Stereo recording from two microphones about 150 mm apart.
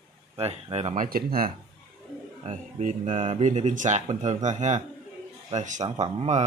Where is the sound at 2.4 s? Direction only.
55° right (ahead or behind).